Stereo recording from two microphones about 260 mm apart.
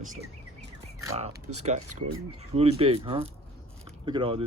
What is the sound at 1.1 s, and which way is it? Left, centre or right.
Speech, right.